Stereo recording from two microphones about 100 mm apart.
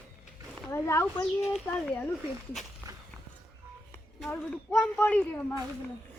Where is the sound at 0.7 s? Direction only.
25° left (ahead or behind).